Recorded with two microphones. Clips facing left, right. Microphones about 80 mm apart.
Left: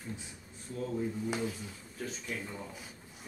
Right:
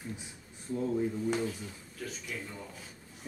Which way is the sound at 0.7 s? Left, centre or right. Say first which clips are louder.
Right 5 dB; centre.